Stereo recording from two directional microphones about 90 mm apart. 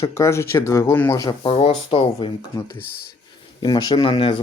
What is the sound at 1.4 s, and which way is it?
Speech, 80° left.